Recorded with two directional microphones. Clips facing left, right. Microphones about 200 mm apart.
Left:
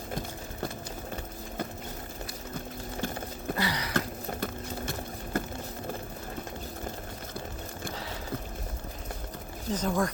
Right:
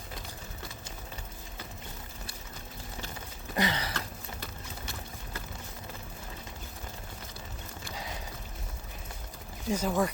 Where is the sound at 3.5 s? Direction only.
25° right (ahead or behind).